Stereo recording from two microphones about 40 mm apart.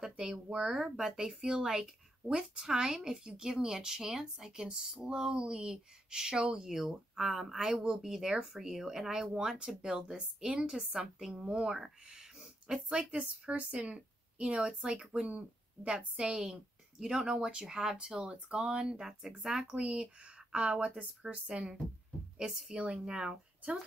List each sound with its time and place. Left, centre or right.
0.0 s speech: centre
7.8 s speech: centre
10.9 s speech: centre
12.9 s a woman's voice: right
18.9 s speech: centre
19.6 s speech: right